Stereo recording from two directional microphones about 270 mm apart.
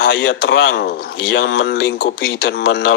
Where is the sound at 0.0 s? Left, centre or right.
Left.